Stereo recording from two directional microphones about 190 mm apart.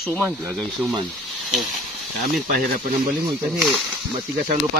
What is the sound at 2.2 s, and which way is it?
Speech, 45° right (ahead or behind).